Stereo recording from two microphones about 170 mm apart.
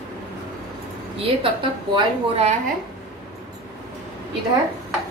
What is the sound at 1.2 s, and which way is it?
A woman's voice, 30° right (ahead or behind).